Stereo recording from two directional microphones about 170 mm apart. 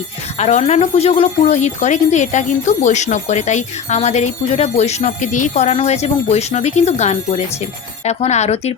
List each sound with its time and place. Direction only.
0.3 s speech: 40° left (ahead or behind)